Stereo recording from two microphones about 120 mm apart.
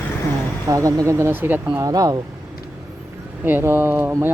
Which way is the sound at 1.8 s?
30° right (ahead or behind).